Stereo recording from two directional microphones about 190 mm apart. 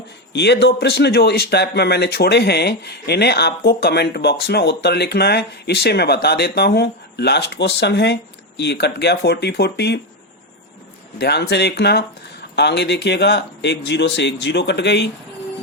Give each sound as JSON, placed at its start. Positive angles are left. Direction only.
{"t": 0.3, "sound": "speech", "side_deg": 60}
{"t": 11.2, "sound": "speech", "side_deg": 60}